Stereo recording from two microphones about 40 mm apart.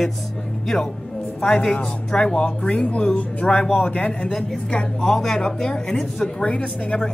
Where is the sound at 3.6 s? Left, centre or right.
Centre.